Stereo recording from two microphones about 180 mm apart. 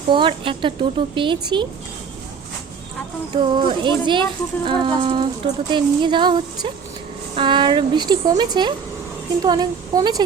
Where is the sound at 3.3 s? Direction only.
25° right (ahead or behind).